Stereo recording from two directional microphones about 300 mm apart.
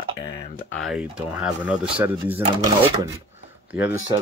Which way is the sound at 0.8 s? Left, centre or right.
Centre.